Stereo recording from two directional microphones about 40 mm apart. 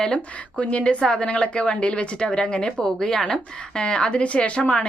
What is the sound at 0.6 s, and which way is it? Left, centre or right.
A woman's voice, left.